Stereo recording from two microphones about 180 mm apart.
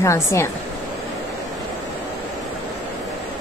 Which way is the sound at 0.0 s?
15° left (ahead or behind).